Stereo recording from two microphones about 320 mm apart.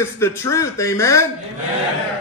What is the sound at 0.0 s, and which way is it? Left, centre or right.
Speech, centre.